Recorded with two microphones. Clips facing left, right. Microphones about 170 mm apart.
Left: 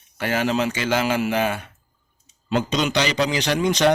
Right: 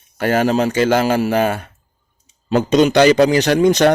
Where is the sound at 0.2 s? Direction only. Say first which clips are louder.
Right 6 dB; 45° right (ahead or behind).